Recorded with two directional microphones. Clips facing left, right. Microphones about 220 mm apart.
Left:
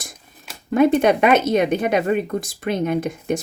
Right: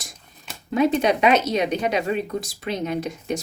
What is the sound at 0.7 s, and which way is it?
Speech, 50° left (ahead or behind).